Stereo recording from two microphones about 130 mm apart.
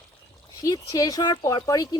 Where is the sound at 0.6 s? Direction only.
25° left (ahead or behind).